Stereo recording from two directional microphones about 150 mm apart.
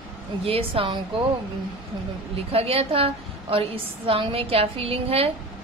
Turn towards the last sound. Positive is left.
turn(degrees=-40)  # may be behind; listen again after turning